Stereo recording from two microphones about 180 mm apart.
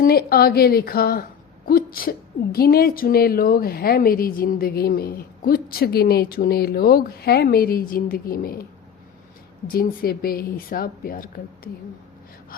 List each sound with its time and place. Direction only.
0.0 s a woman's voice: 60° left (ahead or behind)
9.6 s a woman's voice: 55° left (ahead or behind)